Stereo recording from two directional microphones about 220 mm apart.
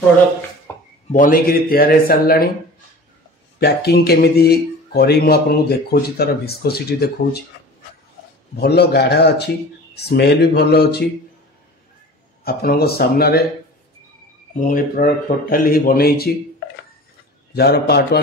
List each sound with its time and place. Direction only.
0.7 s a sound: 15° left (ahead or behind)
1.1 s speech: 40° left (ahead or behind)
3.5 s speech: 45° left (ahead or behind)
8.5 s speech: 45° left (ahead or behind)
12.4 s speech: 45° left (ahead or behind)
14.5 s a man's voice: 40° left (ahead or behind)